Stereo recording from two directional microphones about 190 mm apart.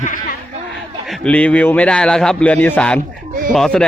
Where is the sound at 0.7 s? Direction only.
Centre (ahead or behind).